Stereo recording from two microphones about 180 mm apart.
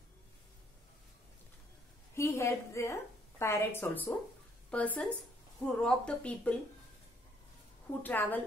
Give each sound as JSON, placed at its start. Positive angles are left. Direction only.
{"t": 2.1, "sound": "a woman's voice", "side_deg": 15}
{"t": 8.0, "sound": "a woman's voice", "side_deg": 10}